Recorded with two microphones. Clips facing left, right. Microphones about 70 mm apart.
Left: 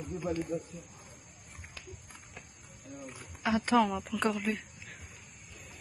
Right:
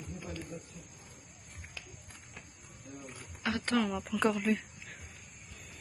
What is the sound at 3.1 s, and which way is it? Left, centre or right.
Speech, centre.